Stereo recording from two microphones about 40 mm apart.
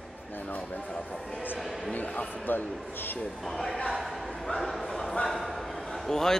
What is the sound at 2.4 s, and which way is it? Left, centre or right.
Speech, left.